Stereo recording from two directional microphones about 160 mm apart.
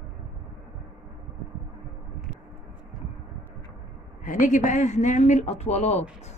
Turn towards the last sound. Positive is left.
turn(degrees=40)  # may be behind; listen again after turning